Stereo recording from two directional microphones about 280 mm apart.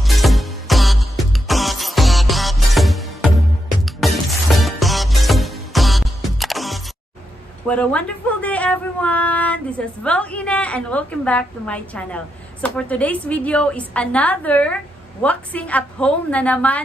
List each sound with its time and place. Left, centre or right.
0.0 s music: centre
7.6 s speech: centre